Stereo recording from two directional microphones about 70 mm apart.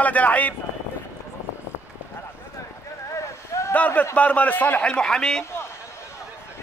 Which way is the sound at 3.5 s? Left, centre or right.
Left.